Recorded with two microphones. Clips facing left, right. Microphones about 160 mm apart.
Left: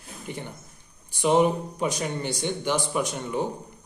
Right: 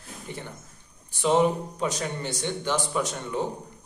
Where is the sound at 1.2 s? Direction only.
15° left (ahead or behind).